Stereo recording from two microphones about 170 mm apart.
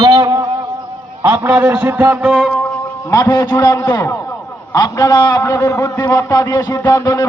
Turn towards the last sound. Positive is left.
turn(degrees=20)  # may be behind; listen again after turning